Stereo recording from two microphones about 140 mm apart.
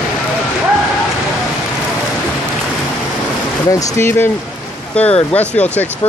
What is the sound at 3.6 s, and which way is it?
Speech, 20° left (ahead or behind).